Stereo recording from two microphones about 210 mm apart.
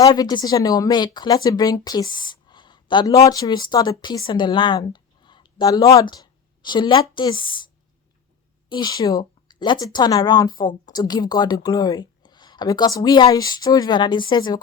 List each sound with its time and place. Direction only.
0.0 s a woman's voice: 20° left (ahead or behind)
8.7 s speech: 20° left (ahead or behind)